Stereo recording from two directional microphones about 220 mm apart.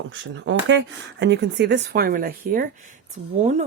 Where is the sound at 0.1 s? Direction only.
55° right (ahead or behind).